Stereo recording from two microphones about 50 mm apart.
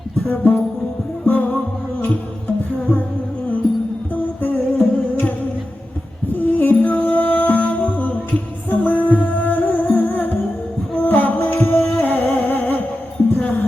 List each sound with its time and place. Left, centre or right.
0.3 s music: left
4.1 s music: left
6.3 s music: left